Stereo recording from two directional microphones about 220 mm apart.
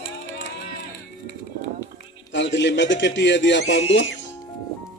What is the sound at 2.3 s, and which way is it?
Speech, 55° left (ahead or behind).